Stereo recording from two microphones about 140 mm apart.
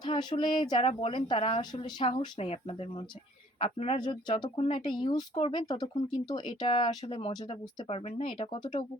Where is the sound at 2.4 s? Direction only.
50° left (ahead or behind).